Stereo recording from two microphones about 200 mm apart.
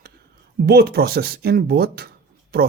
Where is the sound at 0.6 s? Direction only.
55° right (ahead or behind).